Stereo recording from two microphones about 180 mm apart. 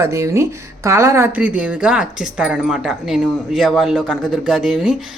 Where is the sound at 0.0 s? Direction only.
15° right (ahead or behind).